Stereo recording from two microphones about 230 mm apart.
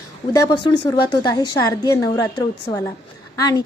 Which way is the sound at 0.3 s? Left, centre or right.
Centre.